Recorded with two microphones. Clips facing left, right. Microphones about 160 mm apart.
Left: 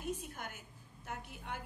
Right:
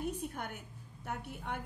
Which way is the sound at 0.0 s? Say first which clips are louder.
Right 4 dB; 60° right (ahead or behind).